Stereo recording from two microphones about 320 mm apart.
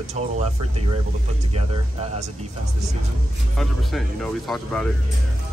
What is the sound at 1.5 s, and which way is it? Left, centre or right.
Speech, centre.